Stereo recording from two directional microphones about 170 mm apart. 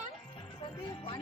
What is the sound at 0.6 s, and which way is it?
Speech, 30° left (ahead or behind).